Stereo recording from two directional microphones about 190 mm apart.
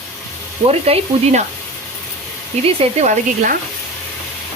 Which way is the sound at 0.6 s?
35° right (ahead or behind).